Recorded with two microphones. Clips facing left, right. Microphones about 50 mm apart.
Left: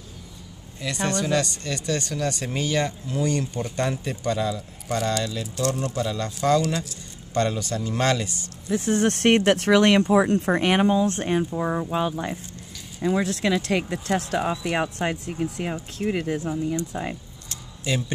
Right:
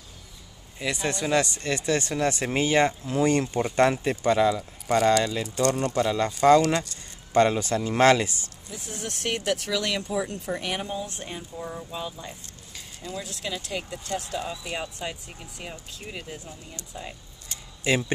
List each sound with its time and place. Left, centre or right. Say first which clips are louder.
0.8 s speech: left 2 dB; centre
4.8 s speech: right 5 dB; centre
5.6 s speech: right 2 dB; centre
7.3 s speech: right 3 dB; right
8.6 s speech: left 16 dB; left
17.5 s a sound: right 3 dB; right